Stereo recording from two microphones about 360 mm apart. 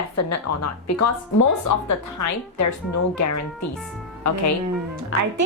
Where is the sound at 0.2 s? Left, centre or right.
Left.